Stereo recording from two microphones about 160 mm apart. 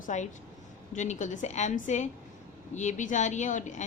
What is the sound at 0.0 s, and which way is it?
A woman's voice, 50° left (ahead or behind).